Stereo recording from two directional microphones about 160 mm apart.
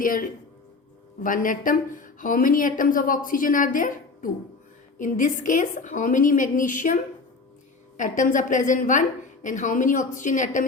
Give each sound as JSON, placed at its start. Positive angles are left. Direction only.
{"t": 0.0, "sound": "a woman's voice", "side_deg": 60}